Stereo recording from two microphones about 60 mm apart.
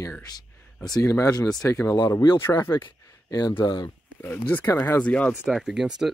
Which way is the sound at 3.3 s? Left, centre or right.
Left.